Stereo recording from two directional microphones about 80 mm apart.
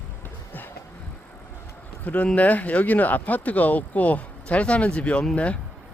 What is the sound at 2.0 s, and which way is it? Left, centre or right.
Speech, centre.